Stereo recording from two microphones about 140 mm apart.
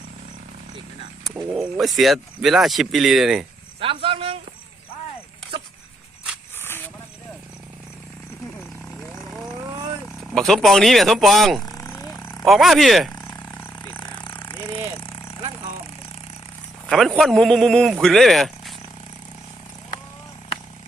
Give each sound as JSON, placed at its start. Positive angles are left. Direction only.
{"t": 1.2, "sound": "speech", "side_deg": 0}
{"t": 3.8, "sound": "speech", "side_deg": -40}
{"t": 6.6, "sound": "a sound", "side_deg": 15}
{"t": 10.2, "sound": "speech", "side_deg": 0}
{"t": 11.6, "sound": "vehicle", "side_deg": 20}
{"t": 12.5, "sound": "speech", "side_deg": 0}
{"t": 13.2, "sound": "roaring cats", "side_deg": 20}
{"t": 13.9, "sound": "vehicle", "side_deg": 35}
{"t": 16.9, "sound": "speech", "side_deg": 0}